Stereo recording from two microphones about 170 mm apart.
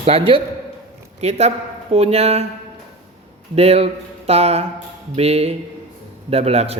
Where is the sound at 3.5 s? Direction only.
35° right (ahead or behind).